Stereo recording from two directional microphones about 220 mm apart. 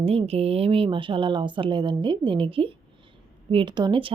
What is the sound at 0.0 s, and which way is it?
Speech, 25° right (ahead or behind).